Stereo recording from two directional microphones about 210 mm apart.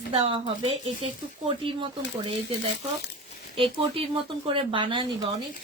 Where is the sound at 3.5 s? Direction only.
25° right (ahead or behind).